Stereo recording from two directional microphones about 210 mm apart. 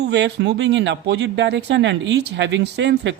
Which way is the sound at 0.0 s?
55° right (ahead or behind).